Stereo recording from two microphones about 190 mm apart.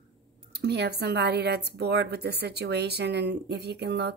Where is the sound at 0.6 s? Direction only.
60° right (ahead or behind).